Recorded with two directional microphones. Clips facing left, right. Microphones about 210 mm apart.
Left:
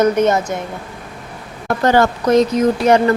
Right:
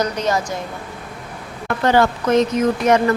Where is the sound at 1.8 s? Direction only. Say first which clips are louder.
Left 2 dB; 45° left (ahead or behind).